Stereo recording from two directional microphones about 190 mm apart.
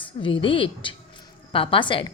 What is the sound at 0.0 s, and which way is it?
A woman's voice, 25° left (ahead or behind).